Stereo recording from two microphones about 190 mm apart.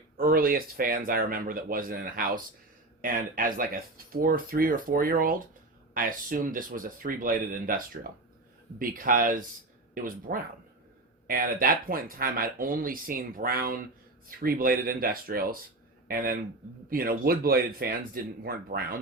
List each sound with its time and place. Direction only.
0.2 s speech: 50° right (ahead or behind)
8.0 s speech: 60° right (ahead or behind)
8.8 s speech: 45° right (ahead or behind)